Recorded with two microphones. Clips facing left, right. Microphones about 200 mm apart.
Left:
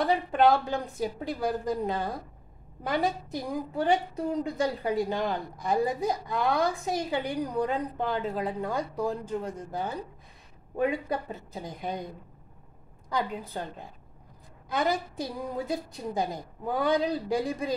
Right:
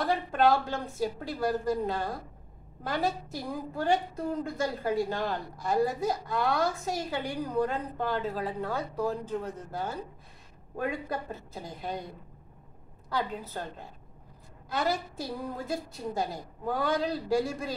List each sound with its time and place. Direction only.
0.0 s a woman's voice: 15° left (ahead or behind)
14.7 s a woman's voice: 15° left (ahead or behind)